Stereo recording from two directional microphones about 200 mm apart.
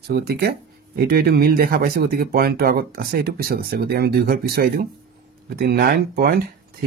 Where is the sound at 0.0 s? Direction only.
50° right (ahead or behind).